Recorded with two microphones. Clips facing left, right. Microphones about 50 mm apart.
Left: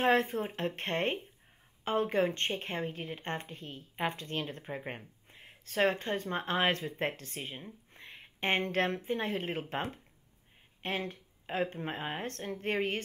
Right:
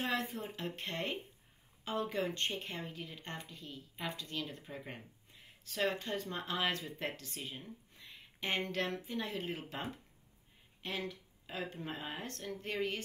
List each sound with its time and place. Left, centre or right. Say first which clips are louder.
0.0 s speech: left 9 dB; left
10.8 s speech: left 5 dB; left